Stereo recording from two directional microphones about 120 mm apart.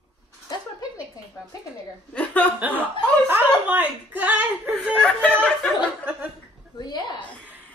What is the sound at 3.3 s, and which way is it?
Speech, 15° right (ahead or behind).